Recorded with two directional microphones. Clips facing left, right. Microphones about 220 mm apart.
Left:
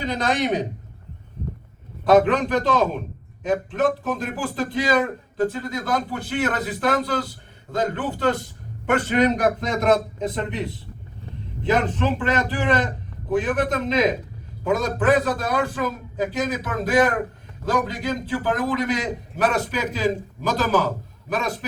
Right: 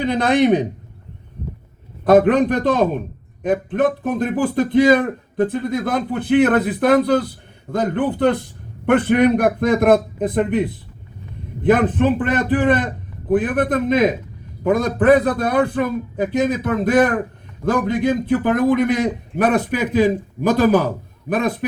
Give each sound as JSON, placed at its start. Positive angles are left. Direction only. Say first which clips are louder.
{"t": 0.0, "sound": "a man's voice", "louder": "right 7 dB", "side_deg": -55}
{"t": 2.0, "sound": "a man's voice", "louder": "right 4 dB", "side_deg": -55}